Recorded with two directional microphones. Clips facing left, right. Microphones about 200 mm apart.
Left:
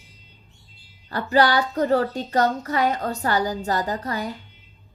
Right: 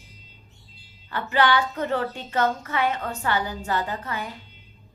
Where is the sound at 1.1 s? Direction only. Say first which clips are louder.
Left 3 dB; 40° left (ahead or behind).